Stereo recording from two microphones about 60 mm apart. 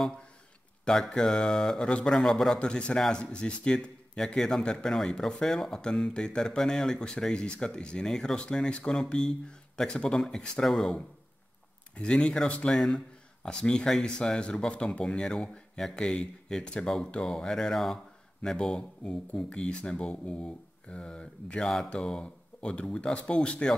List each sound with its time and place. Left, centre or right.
0.8 s speech: centre